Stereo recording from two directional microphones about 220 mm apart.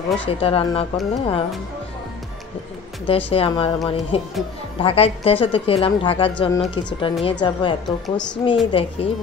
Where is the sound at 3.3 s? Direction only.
25° left (ahead or behind).